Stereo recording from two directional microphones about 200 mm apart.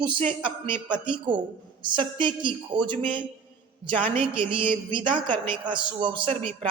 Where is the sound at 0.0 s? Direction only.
25° right (ahead or behind).